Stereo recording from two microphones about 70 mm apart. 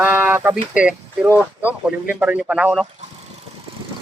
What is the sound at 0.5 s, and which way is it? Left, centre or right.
Speech, centre.